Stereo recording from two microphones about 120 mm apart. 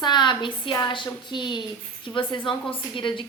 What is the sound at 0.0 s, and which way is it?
A woman's voice, 40° left (ahead or behind).